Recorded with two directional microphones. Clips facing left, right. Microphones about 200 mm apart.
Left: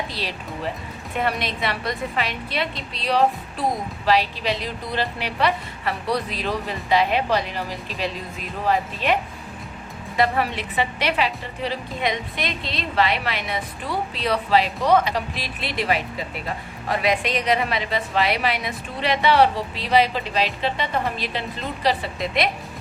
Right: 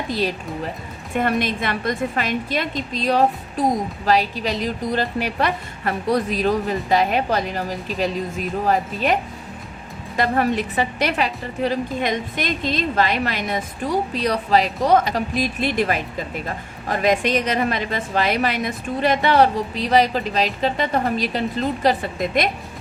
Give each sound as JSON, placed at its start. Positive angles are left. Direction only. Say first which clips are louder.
{"t": 0.1, "sound": "a woman's voice", "louder": "right 8 dB", "side_deg": -45}
{"t": 10.2, "sound": "a woman's voice", "louder": "right 2 dB", "side_deg": -45}